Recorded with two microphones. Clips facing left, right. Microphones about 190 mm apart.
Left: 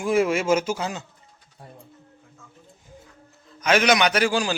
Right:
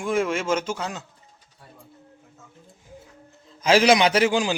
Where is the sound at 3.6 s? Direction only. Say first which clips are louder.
Right 2 dB; 30° right (ahead or behind).